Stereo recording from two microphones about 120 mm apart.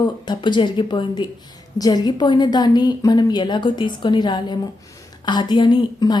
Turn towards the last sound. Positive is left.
turn(degrees=40)  # may be behind; listen again after turning